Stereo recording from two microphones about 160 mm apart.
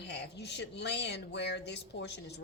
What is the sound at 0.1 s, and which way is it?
Speech, 90° left.